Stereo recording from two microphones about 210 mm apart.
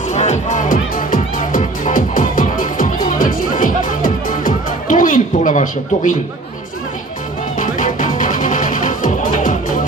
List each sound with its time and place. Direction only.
0.1 s music: 35° left (ahead or behind)
7.6 s music: 40° left (ahead or behind)